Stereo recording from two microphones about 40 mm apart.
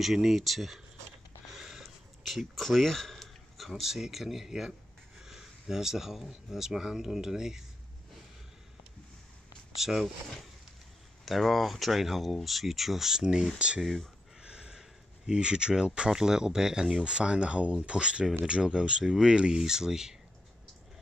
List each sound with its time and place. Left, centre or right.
0.0 s speech: centre
1.5 s a sound: centre
3.8 s speech: centre
9.8 s speech: centre
11.2 s speech: centre
13.7 s speech: centre
14.4 s a sound: right
14.8 s speech: centre